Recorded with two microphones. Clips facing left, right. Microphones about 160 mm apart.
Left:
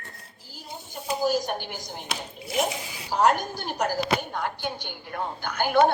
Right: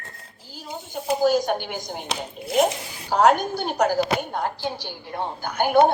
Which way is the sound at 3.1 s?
75° right (ahead or behind).